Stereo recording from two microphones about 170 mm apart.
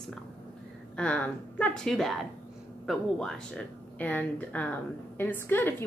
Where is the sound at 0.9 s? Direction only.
5° left (ahead or behind).